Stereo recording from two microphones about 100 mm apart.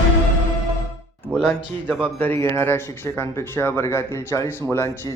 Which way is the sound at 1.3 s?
10° right (ahead or behind).